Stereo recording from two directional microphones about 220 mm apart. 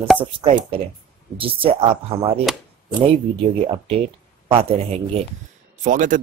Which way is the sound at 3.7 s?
25° right (ahead or behind).